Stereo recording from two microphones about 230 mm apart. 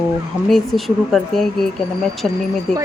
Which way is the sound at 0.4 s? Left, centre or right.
Centre.